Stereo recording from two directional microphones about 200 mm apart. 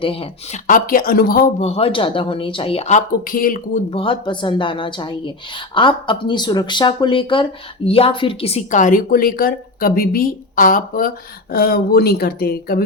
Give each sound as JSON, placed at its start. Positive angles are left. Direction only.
{"t": 0.0, "sound": "a woman's voice", "side_deg": 30}
{"t": 0.7, "sound": "a woman's voice", "side_deg": 45}
{"t": 1.6, "sound": "a woman's voice", "side_deg": 30}
{"t": 3.9, "sound": "a woman's voice", "side_deg": 25}